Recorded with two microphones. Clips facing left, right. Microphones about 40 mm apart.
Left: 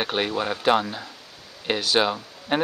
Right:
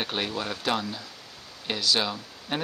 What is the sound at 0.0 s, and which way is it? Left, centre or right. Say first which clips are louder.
Speech: left 5 dB; centre.